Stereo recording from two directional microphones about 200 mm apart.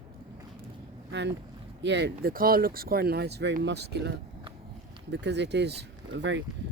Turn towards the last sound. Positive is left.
turn(degrees=-65)  # may be behind; listen again after turning